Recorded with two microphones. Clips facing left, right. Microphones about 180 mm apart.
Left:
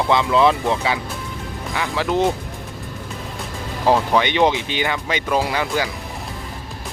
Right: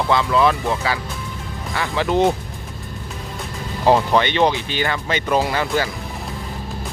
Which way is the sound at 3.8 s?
Centre (ahead or behind).